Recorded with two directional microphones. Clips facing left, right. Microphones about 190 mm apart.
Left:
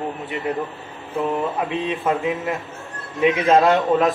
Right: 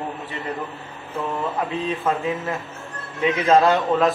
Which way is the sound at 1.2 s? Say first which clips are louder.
Left 3 dB; 15° left (ahead or behind).